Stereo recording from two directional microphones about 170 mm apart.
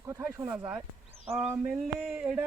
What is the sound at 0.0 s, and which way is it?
Speech, 15° right (ahead or behind).